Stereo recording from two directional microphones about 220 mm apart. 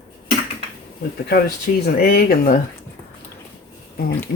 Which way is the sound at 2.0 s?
40° left (ahead or behind).